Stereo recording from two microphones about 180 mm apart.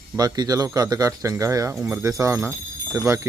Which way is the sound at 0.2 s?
20° right (ahead or behind).